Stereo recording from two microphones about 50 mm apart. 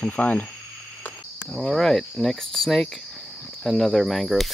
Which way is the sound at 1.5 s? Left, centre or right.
Centre.